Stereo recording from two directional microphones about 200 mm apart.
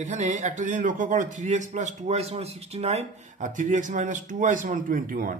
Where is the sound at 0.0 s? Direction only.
40° right (ahead or behind).